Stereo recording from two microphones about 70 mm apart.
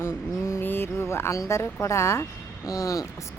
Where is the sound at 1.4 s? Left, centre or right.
Left.